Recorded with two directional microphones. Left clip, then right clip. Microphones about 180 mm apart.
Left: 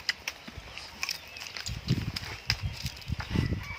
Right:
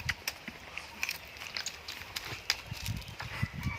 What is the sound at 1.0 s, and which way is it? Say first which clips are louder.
Biting: left 2 dB; 30° left (ahead or behind).